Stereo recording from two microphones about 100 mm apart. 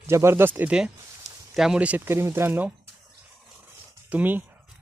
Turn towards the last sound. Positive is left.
turn(degrees=-20)  # may be behind; listen again after turning